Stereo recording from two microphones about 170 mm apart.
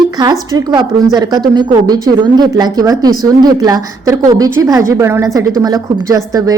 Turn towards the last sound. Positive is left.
turn(degrees=-20)  # may be behind; listen again after turning